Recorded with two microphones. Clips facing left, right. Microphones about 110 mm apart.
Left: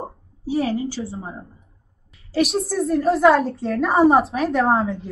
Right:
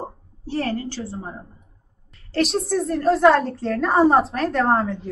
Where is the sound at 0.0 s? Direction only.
Centre (ahead or behind).